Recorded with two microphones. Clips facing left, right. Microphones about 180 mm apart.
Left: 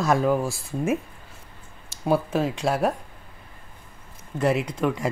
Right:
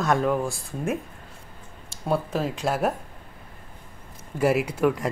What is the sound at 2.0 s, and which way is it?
Speech, centre (ahead or behind).